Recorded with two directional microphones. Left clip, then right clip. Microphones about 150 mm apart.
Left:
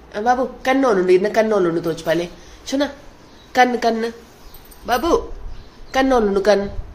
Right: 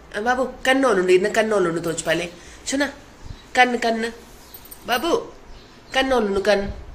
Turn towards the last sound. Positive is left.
turn(degrees=40)  # may be behind; listen again after turning